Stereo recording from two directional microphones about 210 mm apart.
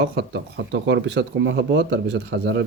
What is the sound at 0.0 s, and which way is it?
Speech, 55° right (ahead or behind).